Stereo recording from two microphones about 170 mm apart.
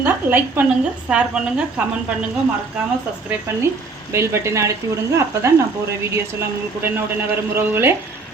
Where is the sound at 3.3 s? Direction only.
15° right (ahead or behind).